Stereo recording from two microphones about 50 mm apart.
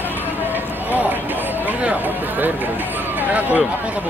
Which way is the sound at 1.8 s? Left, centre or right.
Right.